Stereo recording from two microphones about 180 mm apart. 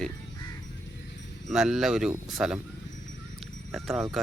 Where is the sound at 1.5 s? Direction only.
5° right (ahead or behind).